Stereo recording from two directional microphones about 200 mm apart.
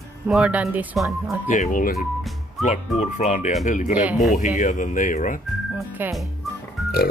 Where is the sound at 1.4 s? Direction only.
40° left (ahead or behind).